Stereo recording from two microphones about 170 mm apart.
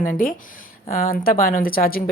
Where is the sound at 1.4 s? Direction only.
60° left (ahead or behind).